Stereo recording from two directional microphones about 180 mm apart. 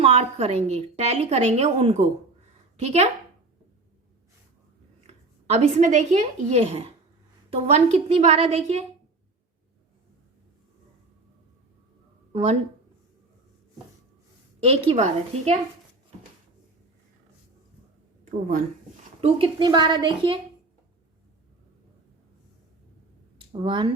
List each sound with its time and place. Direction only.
0.0 s a woman's voice: 35° right (ahead or behind)
5.5 s a woman's voice: 40° right (ahead or behind)
12.3 s speech: 35° right (ahead or behind)
14.6 s a woman's voice: 35° right (ahead or behind)
18.3 s speech: 45° right (ahead or behind)
19.2 s a woman's voice: 30° right (ahead or behind)
23.4 s speech: 30° right (ahead or behind)